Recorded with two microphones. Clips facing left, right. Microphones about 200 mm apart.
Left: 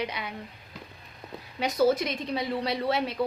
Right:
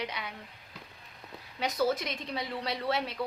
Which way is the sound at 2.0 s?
10° left (ahead or behind).